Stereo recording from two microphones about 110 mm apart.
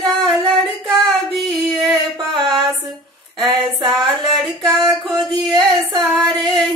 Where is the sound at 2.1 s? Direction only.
45° right (ahead or behind).